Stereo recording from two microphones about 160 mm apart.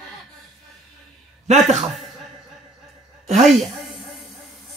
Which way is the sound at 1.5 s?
45° right (ahead or behind).